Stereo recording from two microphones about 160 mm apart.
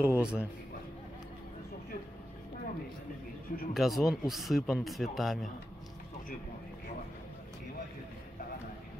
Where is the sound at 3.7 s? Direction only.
Centre (ahead or behind).